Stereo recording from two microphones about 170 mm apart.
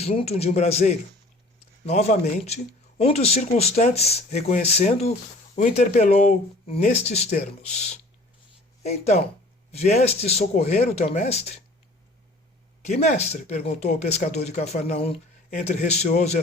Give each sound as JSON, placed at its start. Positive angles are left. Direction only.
{"t": 0.0, "sound": "speech", "side_deg": 40}
{"t": 12.9, "sound": "speech", "side_deg": 40}